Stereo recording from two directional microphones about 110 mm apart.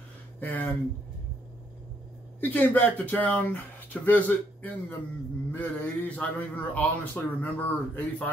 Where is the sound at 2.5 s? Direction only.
15° left (ahead or behind).